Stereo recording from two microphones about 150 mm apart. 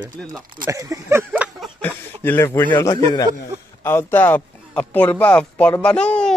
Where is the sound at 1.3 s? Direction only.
5° right (ahead or behind).